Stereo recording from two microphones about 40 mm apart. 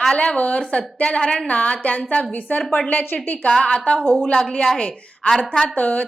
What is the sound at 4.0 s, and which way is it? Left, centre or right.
Speech, centre.